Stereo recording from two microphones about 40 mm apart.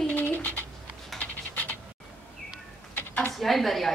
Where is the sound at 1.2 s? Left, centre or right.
Left.